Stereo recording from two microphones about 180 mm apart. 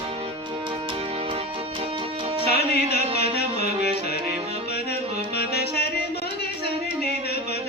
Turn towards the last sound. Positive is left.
turn(degrees=65)  # may be behind; listen again after turning